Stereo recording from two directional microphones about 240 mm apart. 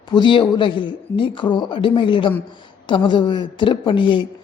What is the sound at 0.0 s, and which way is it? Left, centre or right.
A man's voice, centre.